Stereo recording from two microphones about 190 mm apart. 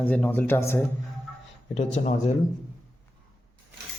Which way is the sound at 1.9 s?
35° left (ahead or behind).